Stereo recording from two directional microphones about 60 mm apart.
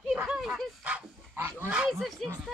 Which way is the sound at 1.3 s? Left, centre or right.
Right.